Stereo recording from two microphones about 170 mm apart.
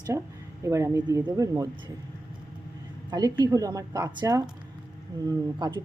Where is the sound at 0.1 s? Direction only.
15° right (ahead or behind).